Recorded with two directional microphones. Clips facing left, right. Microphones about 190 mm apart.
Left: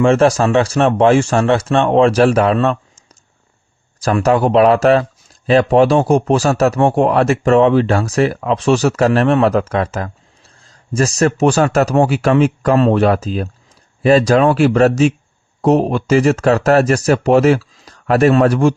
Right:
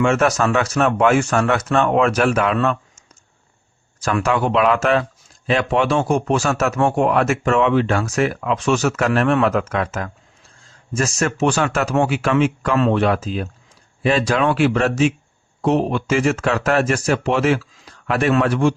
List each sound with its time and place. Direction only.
0.0 s a man's voice: 30° left (ahead or behind)
4.0 s a man's voice: 40° left (ahead or behind)